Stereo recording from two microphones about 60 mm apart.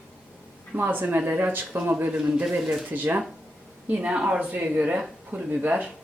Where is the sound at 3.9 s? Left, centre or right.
Right.